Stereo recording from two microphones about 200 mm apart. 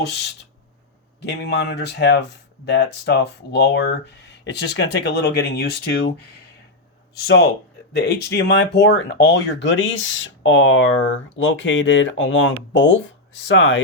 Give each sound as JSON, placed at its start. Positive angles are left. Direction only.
{"t": 1.2, "sound": "speech", "side_deg": 55}